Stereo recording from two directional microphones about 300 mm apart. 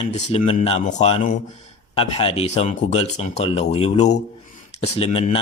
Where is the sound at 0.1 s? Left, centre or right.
Left.